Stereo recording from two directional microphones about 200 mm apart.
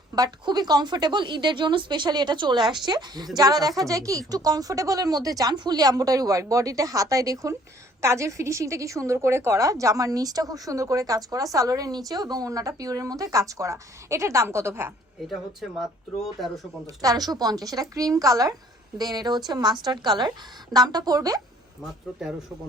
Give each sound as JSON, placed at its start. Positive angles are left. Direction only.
{"t": 0.2, "sound": "a woman's voice", "side_deg": -20}
{"t": 16.8, "sound": "a woman's voice", "side_deg": -15}